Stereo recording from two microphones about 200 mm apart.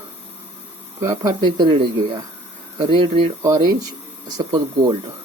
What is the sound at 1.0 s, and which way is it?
Speech, 15° right (ahead or behind).